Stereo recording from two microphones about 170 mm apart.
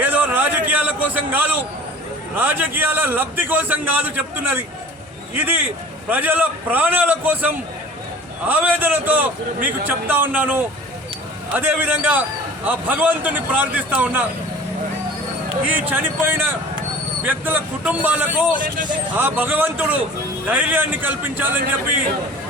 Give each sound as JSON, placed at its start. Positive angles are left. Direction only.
{"t": 0.0, "sound": "a sound", "side_deg": -10}
{"t": 2.3, "sound": "a man's voice", "side_deg": -10}
{"t": 15.6, "sound": "a man's voice", "side_deg": -10}